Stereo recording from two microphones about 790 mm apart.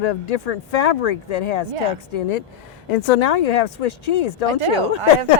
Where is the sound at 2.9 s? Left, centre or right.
Left.